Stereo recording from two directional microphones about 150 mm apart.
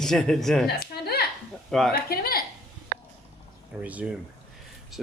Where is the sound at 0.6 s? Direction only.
90° left.